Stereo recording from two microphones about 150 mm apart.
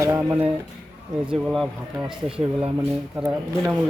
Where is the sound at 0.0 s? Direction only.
20° right (ahead or behind).